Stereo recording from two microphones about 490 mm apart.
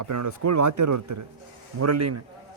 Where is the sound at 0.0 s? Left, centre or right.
Right.